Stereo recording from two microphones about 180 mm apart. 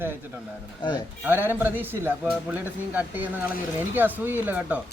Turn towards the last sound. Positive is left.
turn(degrees=-10)  # may be behind; listen again after turning